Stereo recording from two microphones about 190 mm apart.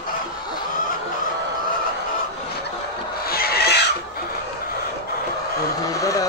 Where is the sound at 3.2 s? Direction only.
55° left (ahead or behind).